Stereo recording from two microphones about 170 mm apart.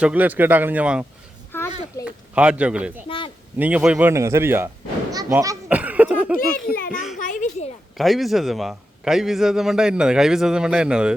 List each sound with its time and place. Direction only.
0.0 s a man's voice: 10° right (ahead or behind)
1.5 s a sound: 15° left (ahead or behind)
2.0 s a man's voice: 5° right (ahead or behind)
4.1 s a man's voice: 15° right (ahead or behind)
5.6 s cough: 10° right (ahead or behind)
6.7 s a child's voice: 55° left (ahead or behind)
7.9 s a man's voice: centre (ahead or behind)